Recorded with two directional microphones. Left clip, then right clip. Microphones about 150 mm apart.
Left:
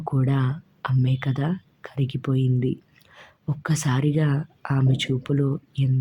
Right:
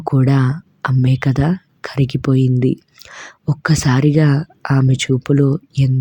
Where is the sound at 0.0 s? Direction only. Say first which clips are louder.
Right 9 dB; 35° right (ahead or behind).